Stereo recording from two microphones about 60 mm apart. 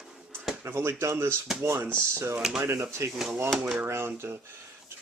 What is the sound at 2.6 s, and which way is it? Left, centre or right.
Speech, right.